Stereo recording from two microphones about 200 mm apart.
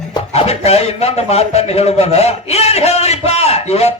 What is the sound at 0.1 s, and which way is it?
A man's voice, 30° left (ahead or behind).